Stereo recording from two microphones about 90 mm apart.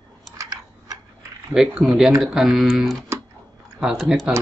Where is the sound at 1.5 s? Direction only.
10° right (ahead or behind).